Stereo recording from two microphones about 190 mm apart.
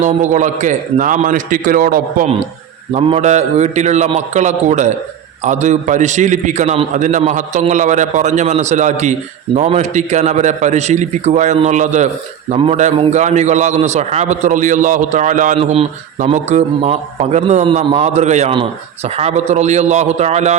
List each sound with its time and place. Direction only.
0.0 s a man's voice: 40° right (ahead or behind)
2.9 s a man's voice: 30° right (ahead or behind)
15.5 s a man's voice: 30° right (ahead or behind)